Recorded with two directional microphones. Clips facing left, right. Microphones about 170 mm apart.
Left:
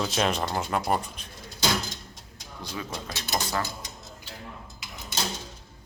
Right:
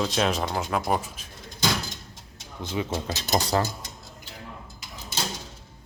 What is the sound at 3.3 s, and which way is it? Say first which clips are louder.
Speech: right 5 dB; 40° right (ahead or behind).